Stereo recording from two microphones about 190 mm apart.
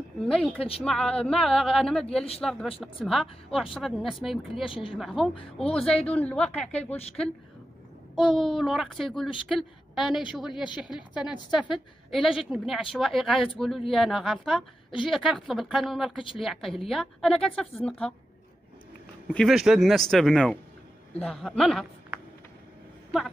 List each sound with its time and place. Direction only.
0.3 s a woman's voice: 5° left (ahead or behind)
0.6 s a woman's voice: 30° left (ahead or behind)
0.8 s a woman's voice: 5° left (ahead or behind)
4.6 s a woman's voice: 30° left (ahead or behind)
4.9 s a woman's voice: centre (ahead or behind)
8.4 s a woman's voice: centre (ahead or behind)
19.3 s a woman's voice: centre (ahead or behind)